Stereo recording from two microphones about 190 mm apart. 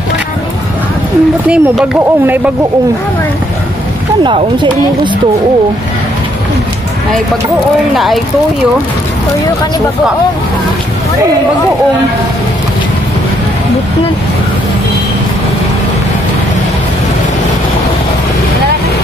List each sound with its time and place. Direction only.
1.5 s speech: 5° right (ahead or behind)
4.2 s speech: 25° right (ahead or behind)
7.9 s speech: centre (ahead or behind)